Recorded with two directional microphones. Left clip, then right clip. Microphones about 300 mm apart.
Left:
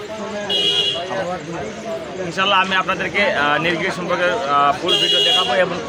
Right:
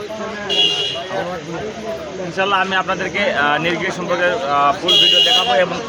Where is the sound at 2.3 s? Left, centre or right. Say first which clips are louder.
Even; left.